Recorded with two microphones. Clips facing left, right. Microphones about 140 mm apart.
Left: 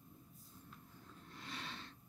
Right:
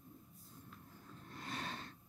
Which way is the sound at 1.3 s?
45° right (ahead or behind).